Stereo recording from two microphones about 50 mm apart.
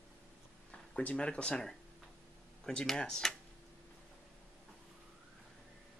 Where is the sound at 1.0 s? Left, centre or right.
Left.